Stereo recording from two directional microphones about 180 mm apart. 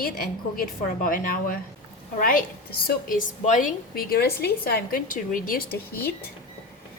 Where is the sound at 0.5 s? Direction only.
50° left (ahead or behind).